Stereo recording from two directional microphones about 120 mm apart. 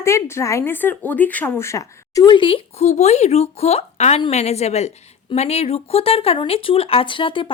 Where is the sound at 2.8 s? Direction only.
70° left (ahead or behind).